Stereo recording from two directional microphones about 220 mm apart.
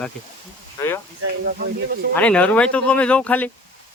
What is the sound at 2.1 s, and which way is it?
Speech, 5° left (ahead or behind).